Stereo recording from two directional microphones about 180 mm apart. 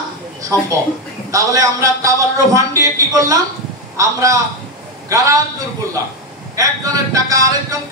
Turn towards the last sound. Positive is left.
turn(degrees=-20)  # may be behind; listen again after turning